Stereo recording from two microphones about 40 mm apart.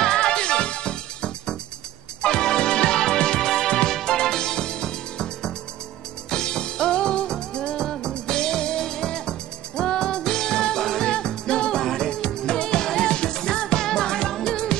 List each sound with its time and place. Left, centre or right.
0.0 s music: centre
11.8 s music: centre
12.1 s music: centre